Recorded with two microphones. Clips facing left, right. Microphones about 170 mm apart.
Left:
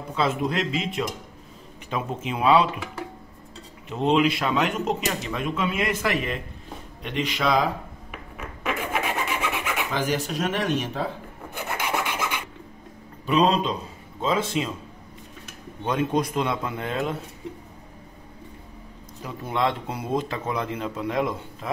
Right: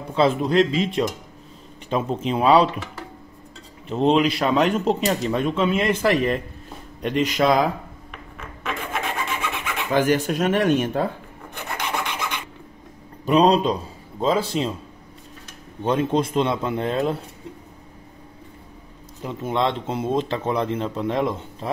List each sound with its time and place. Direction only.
0.1 s speech: 30° right (ahead or behind)
3.9 s speech: 35° right (ahead or behind)
8.1 s filing: 10° left (ahead or behind)
9.9 s speech: 55° right (ahead or behind)
11.5 s filing: 10° left (ahead or behind)
13.3 s speech: 40° right (ahead or behind)
15.8 s speech: 30° right (ahead or behind)
19.2 s speech: 25° right (ahead or behind)